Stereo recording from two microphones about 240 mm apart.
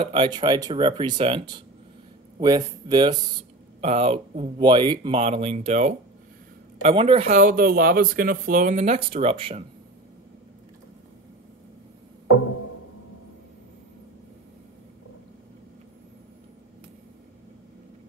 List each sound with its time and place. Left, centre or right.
0.0 s speech: right